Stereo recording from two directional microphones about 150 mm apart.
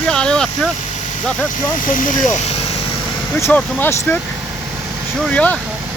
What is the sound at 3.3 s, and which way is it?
Speech, 10° left (ahead or behind).